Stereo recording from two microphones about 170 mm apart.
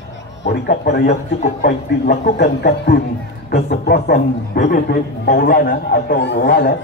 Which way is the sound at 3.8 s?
70° left (ahead or behind).